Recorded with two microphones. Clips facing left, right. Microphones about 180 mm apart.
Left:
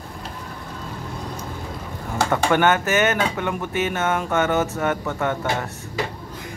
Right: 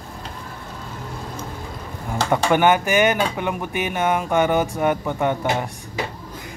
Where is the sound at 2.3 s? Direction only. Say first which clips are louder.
Right 2 dB; 10° right (ahead or behind).